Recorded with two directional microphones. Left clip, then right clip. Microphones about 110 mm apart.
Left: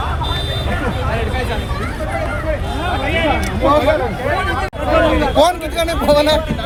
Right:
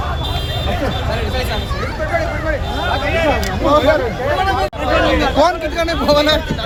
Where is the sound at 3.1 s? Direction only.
45° right (ahead or behind).